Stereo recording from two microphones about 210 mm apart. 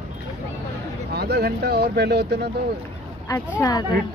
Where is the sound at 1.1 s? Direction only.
50° right (ahead or behind).